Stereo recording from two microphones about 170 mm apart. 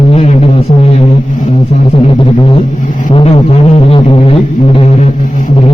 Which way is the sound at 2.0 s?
30° left (ahead or behind).